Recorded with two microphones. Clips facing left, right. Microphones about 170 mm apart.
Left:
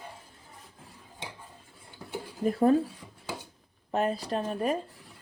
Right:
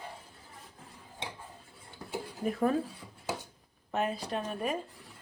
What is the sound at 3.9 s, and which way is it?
Speech, 35° left (ahead or behind).